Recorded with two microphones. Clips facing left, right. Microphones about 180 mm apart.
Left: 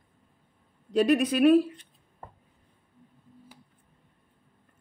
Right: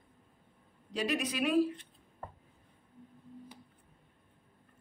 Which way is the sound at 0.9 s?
55° left (ahead or behind).